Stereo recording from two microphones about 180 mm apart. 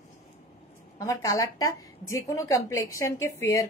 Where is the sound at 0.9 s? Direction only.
20° left (ahead or behind).